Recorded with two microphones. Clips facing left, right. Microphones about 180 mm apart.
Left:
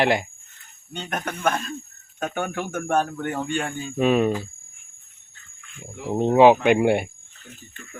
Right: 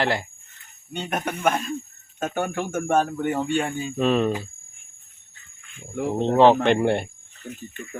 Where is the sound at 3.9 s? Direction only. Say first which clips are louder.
Left 2 dB; 10° left (ahead or behind).